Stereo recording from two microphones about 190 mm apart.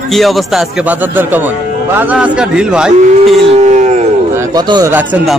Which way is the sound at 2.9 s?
35° right (ahead or behind).